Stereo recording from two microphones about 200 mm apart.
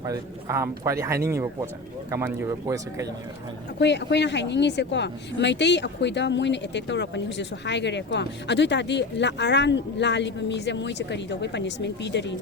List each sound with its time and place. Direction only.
0.0 s a man's voice: 15° right (ahead or behind)
3.8 s speech: 60° left (ahead or behind)